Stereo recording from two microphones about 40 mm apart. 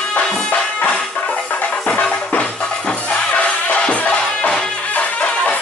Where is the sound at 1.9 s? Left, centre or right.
Left.